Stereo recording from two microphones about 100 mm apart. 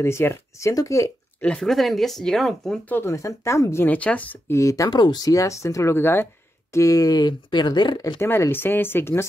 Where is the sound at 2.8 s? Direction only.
20° left (ahead or behind).